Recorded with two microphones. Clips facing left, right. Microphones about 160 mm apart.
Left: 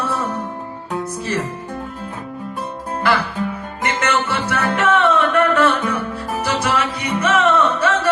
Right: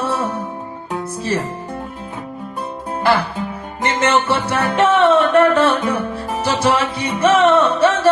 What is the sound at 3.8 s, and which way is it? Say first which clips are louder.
Music: right 4 dB; 30° right (ahead or behind).